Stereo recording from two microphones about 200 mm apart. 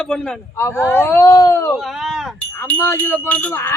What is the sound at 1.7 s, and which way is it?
Speech, centre (ahead or behind).